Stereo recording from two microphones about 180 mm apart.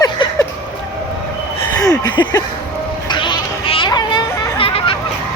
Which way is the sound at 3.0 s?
25° left (ahead or behind).